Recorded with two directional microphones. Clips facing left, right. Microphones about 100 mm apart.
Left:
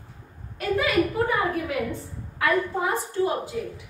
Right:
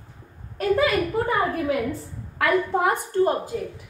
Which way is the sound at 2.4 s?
65° right (ahead or behind).